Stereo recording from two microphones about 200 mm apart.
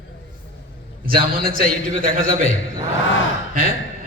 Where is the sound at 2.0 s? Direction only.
75° left (ahead or behind).